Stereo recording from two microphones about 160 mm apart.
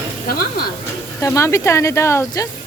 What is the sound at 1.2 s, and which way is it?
Speech, 20° left (ahead or behind).